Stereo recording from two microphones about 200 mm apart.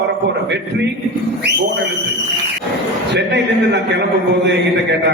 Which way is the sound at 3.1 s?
60° right (ahead or behind).